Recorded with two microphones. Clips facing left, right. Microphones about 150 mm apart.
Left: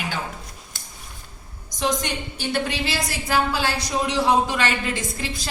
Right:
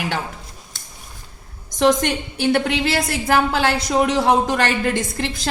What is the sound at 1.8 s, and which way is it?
A woman's voice, 60° right (ahead or behind).